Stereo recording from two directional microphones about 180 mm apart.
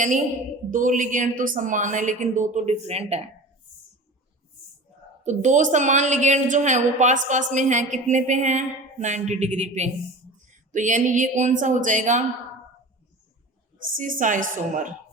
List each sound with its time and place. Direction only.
0.7 s a woman's voice: 45° right (ahead or behind)
5.2 s a woman's voice: 40° right (ahead or behind)
13.9 s a woman's voice: 45° right (ahead or behind)